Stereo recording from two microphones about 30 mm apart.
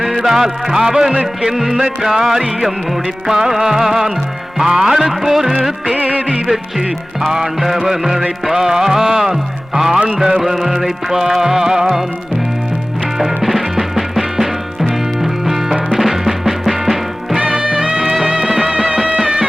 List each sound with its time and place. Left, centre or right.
0.2 s music: centre
6.0 s music of bollywood: right
6.2 s music: centre
13.1 s music: centre
17.5 s music: right